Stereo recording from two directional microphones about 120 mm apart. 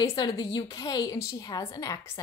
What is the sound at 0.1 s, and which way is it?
A woman's voice, 30° left (ahead or behind).